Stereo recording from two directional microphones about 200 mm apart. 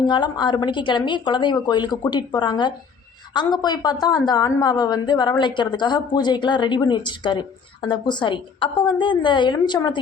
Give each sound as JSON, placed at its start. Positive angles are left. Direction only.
{"t": 0.0, "sound": "a woman's voice", "side_deg": 20}